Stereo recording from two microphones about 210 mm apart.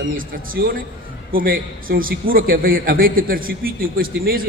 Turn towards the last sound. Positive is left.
turn(degrees=-45)  # may be behind; listen again after turning